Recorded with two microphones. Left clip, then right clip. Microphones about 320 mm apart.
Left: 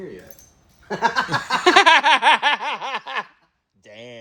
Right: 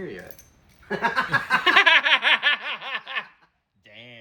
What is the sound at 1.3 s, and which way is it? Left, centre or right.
Snicker, centre.